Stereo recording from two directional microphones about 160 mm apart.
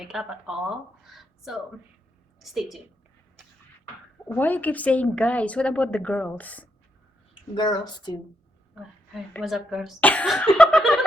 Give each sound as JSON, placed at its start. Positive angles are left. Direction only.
{"t": 0.0, "sound": "speech", "side_deg": 0}
{"t": 4.3, "sound": "a woman's voice", "side_deg": 10}
{"t": 7.5, "sound": "speech", "side_deg": 30}
{"t": 8.7, "sound": "a sound", "side_deg": -5}
{"t": 9.4, "sound": "speech", "side_deg": 0}
{"t": 10.0, "sound": "a woman's voice", "side_deg": 10}